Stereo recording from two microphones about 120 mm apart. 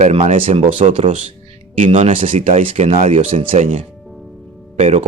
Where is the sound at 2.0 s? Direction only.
65° right (ahead or behind); by 3.6 s 50° right (ahead or behind).